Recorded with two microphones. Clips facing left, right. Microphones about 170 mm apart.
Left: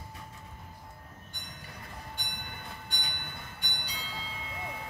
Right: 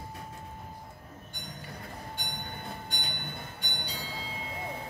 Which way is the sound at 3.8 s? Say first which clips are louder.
Right 3 dB; 35° right (ahead or behind).